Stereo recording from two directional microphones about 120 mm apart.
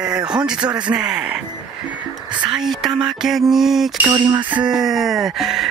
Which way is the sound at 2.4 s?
5° right (ahead or behind).